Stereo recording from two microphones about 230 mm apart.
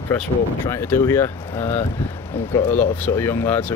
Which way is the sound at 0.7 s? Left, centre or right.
Centre.